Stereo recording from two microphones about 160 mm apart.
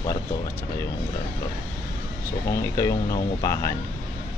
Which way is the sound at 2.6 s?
20° left (ahead or behind).